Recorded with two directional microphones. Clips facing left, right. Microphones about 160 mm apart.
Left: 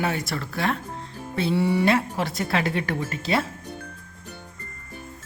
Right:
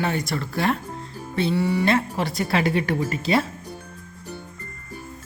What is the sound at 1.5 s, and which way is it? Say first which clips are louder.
Speech: left 2 dB; 25° left (ahead or behind).